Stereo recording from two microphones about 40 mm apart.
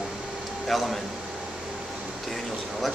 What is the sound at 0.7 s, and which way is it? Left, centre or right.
Speech, centre.